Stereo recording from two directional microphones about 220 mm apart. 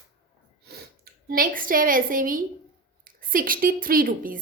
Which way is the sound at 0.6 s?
45° right (ahead or behind).